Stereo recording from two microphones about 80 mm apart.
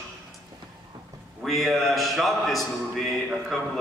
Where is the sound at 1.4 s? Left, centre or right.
Centre.